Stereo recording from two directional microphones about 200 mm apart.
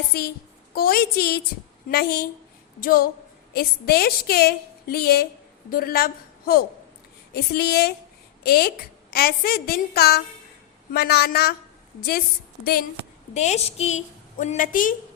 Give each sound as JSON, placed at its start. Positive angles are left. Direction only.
{"t": 0.1, "sound": "a woman's voice", "side_deg": 50}
{"t": 13.3, "sound": "a woman's voice", "side_deg": 35}